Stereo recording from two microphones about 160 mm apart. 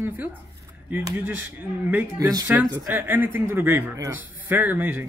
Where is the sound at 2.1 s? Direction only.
25° right (ahead or behind).